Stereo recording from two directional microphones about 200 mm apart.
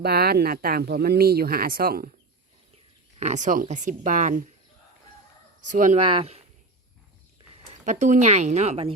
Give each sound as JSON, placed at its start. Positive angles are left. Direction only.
{"t": 0.0, "sound": "speech", "side_deg": -50}
{"t": 3.2, "sound": "speech", "side_deg": -35}
{"t": 5.6, "sound": "speech", "side_deg": -40}
{"t": 6.0, "sound": "speech", "side_deg": -25}
{"t": 7.5, "sound": "speech", "side_deg": -35}